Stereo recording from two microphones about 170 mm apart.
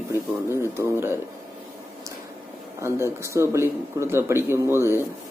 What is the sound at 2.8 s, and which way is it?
Speech, 15° right (ahead or behind).